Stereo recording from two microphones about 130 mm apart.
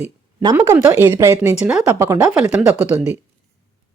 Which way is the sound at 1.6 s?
10° right (ahead or behind).